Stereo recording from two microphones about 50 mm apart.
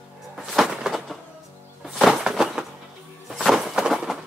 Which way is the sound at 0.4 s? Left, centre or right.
Centre.